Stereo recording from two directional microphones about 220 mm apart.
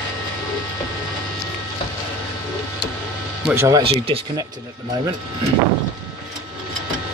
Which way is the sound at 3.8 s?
25° right (ahead or behind).